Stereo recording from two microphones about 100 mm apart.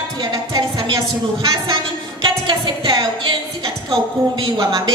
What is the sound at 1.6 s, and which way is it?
A woman's voice, 55° right (ahead or behind).